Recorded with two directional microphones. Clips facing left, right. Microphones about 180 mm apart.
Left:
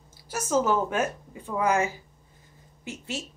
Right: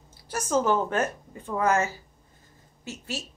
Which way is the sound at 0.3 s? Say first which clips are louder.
Even; 10° left (ahead or behind).